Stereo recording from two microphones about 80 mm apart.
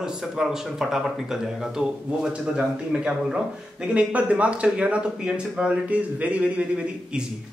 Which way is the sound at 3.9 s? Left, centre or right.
Centre.